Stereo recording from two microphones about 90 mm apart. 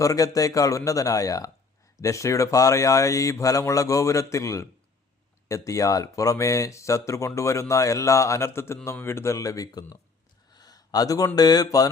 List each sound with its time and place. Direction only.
0.0 s speech: 40° left (ahead or behind)
10.5 s a sound: 45° left (ahead or behind)
11.3 s mantra: 45° left (ahead or behind)